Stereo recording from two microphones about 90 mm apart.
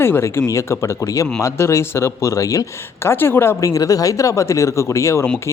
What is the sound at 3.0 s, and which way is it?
Speech, 25° left (ahead or behind).